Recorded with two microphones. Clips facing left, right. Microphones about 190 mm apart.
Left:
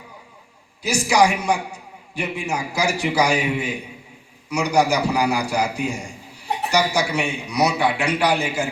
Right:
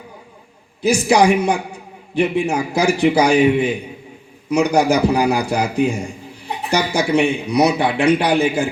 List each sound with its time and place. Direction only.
0.8 s a man's voice: 55° right (ahead or behind)